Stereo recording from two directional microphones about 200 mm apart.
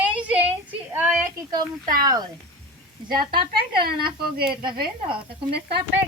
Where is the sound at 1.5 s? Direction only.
20° right (ahead or behind).